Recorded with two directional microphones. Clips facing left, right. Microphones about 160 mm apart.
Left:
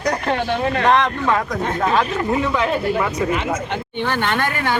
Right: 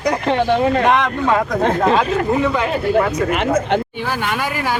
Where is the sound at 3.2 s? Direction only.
70° right (ahead or behind).